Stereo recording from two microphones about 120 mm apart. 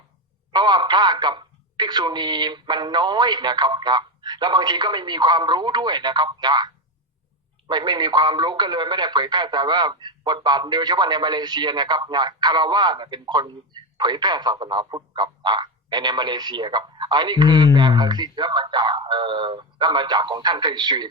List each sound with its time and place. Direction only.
0.5 s speech: 35° right (ahead or behind)
7.7 s speech: 35° right (ahead or behind)